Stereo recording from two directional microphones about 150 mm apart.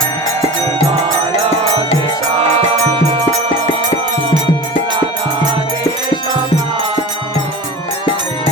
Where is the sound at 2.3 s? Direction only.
40° right (ahead or behind).